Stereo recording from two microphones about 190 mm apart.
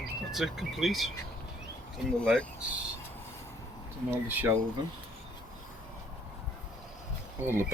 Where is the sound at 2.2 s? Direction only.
5° left (ahead or behind).